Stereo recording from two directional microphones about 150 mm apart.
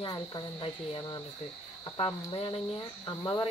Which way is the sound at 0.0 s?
30° left (ahead or behind).